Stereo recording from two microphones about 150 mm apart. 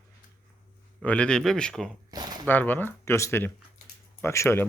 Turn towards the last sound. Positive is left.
turn(degrees=15)  # may be behind; listen again after turning